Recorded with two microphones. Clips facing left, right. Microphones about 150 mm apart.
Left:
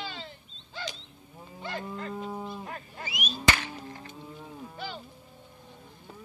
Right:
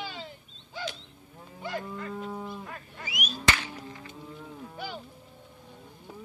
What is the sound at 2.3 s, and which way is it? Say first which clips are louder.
Cattle: even; 20° left (ahead or behind).